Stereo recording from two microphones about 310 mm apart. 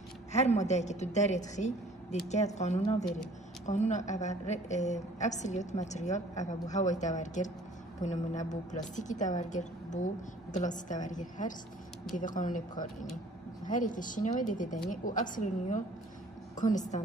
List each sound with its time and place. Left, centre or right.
0.3 s a woman's voice: left